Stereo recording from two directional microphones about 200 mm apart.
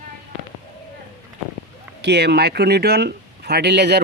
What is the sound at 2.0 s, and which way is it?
Speech, 55° right (ahead or behind).